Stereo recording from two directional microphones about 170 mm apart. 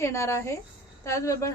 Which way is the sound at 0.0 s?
15° left (ahead or behind).